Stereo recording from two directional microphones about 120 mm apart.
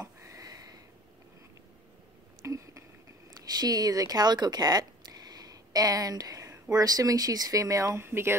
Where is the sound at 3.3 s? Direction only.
35° right (ahead or behind).